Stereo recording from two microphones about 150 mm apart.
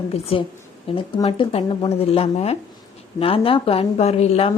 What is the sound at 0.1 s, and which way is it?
A woman's voice, 40° left (ahead or behind).